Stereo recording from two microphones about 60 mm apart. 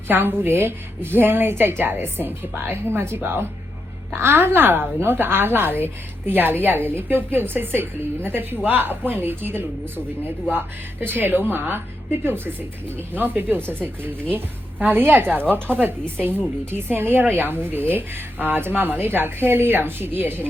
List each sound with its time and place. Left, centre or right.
0.1 s a woman's voice: right
11.0 s a woman's voice: right
13.1 s a woman's voice: right
16.7 s a woman's voice: right